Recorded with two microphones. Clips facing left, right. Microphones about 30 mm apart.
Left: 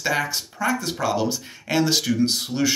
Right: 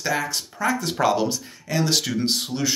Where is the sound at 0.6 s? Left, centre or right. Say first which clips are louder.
Right 2 dB; centre.